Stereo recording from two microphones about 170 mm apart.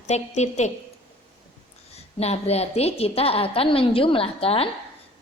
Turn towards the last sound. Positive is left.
turn(degrees=35)  # may be behind; listen again after turning